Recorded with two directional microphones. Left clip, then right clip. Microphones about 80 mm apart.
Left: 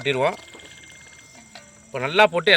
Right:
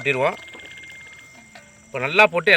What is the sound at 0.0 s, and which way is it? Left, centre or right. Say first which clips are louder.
Speech: right 1 dB; centre.